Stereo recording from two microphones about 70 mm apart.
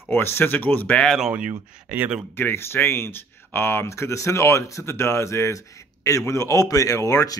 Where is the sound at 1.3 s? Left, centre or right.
Centre.